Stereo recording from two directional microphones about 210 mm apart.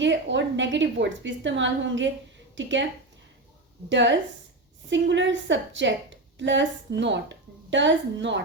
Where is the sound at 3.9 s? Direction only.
60° right (ahead or behind).